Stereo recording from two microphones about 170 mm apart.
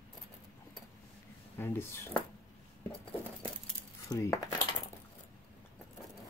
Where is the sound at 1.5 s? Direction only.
15° left (ahead or behind).